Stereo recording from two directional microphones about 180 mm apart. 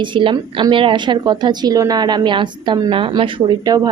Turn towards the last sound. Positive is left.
turn(degrees=-25)  # may be behind; listen again after turning